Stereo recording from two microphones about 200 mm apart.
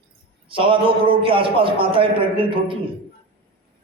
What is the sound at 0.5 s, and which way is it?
A man's voice, 25° right (ahead or behind).